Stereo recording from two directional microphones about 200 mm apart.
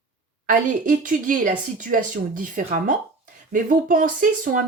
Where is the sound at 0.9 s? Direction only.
40° right (ahead or behind).